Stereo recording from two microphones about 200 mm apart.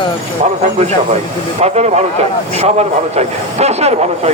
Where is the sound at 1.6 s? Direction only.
35° right (ahead or behind).